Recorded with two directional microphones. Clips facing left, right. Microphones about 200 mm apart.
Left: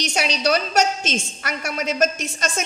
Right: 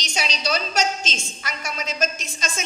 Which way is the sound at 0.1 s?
65° left (ahead or behind).